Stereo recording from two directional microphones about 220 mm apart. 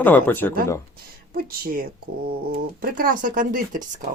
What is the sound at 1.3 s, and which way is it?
Speech, 40° right (ahead or behind).